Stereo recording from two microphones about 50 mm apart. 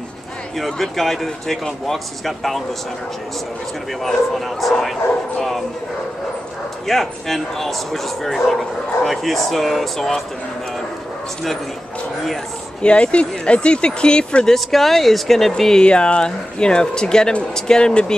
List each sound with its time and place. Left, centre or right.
0.6 s speech: centre
4.0 s speech: centre
6.9 s speech: centre
12.8 s speech: left
14.5 s speech: centre
15.8 s speech: left